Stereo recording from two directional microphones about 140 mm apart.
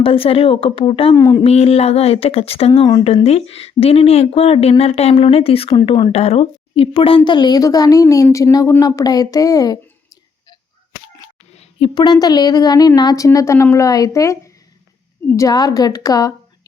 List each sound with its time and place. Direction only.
0.0 s a woman's voice: 40° left (ahead or behind)
1.1 s speech: 25° left (ahead or behind)
1.5 s a woman's voice: 45° left (ahead or behind); by 10.6 s 25° left (ahead or behind)
11.5 s a sound: 50° left (ahead or behind)
11.9 s speech: 30° left (ahead or behind)